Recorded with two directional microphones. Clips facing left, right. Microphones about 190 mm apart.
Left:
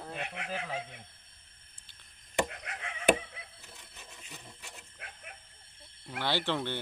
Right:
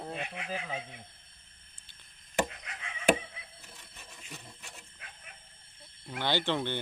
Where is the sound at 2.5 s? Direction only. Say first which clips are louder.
Left 3 dB; 60° left (ahead or behind).